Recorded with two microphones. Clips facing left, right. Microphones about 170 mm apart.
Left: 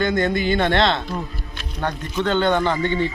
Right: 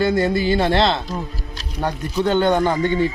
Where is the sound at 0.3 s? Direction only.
35° right (ahead or behind).